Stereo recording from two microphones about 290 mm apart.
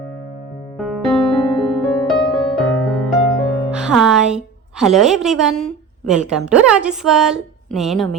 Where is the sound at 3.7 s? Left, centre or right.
Centre.